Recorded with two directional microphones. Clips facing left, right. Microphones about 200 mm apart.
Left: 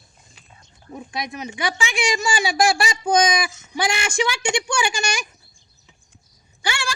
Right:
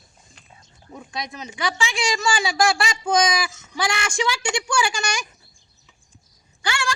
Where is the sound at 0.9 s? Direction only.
20° left (ahead or behind).